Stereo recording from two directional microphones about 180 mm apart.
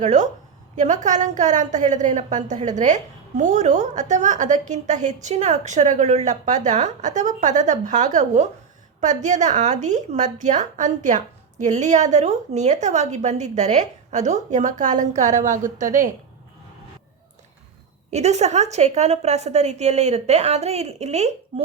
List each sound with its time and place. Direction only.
0.0 s a woman's voice: 40° right (ahead or behind)
18.1 s a woman's voice: 40° right (ahead or behind)